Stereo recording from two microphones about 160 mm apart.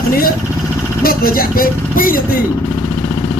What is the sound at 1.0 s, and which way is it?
Speech, 65° left (ahead or behind).